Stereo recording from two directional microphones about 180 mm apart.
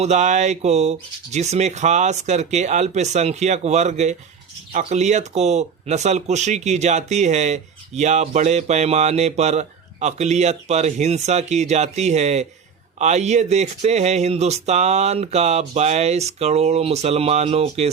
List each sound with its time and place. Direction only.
0.0 s speech: 40° right (ahead or behind)